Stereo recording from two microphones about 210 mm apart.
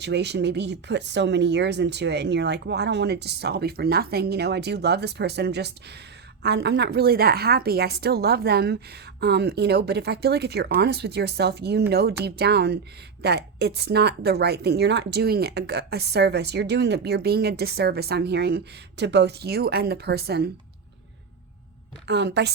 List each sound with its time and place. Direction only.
0.0 s a woman's voice: 55° right (ahead or behind)
22.0 s a woman's voice: 55° right (ahead or behind)